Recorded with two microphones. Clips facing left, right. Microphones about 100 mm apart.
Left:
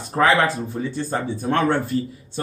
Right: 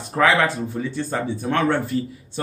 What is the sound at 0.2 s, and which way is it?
Speech, 30° left (ahead or behind).